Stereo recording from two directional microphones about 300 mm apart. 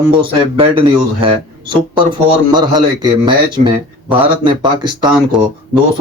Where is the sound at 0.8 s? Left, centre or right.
Centre.